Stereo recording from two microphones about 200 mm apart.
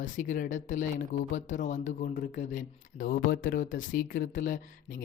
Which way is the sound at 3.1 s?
55° left (ahead or behind).